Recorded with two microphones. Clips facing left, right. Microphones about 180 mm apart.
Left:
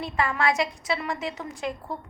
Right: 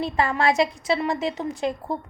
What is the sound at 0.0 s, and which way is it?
A woman's voice, 30° right (ahead or behind).